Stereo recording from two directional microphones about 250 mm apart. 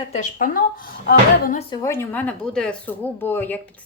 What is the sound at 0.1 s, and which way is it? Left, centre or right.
Speech, left.